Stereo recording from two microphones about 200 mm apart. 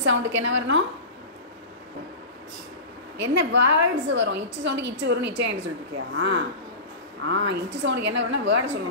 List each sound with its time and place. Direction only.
0.0 s a woman's voice: 70° right (ahead or behind)
3.2 s a woman's voice: 65° right (ahead or behind)